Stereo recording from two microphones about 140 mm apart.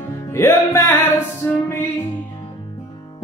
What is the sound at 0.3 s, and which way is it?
Music, 20° left (ahead or behind).